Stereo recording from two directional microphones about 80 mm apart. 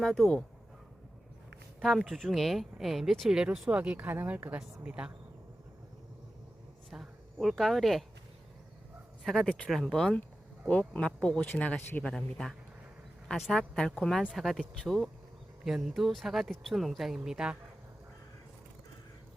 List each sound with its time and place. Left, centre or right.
0.0 s a woman's voice: centre
1.8 s a woman's voice: centre
3.7 s speech: centre
6.9 s a sound: centre
9.2 s a woman's voice: centre
12.0 s a woman's voice: centre